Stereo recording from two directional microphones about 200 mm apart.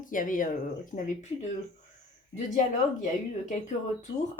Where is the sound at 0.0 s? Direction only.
40° left (ahead or behind).